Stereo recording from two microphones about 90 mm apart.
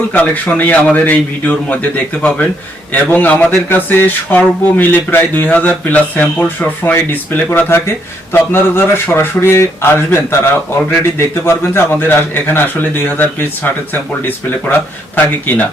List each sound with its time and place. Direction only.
0.1 s a man's voice: 15° left (ahead or behind)